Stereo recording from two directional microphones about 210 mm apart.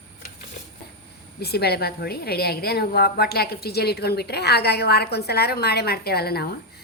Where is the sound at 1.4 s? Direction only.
50° left (ahead or behind).